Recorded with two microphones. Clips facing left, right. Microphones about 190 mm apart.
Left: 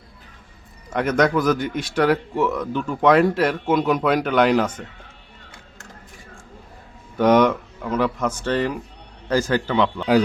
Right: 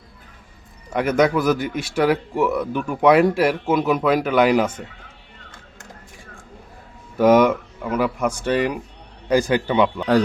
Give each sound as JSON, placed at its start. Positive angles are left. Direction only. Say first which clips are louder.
{"t": 0.9, "sound": "speech", "louder": "right 1 dB", "side_deg": -5}
{"t": 7.2, "sound": "speech", "louder": "right 2 dB", "side_deg": -5}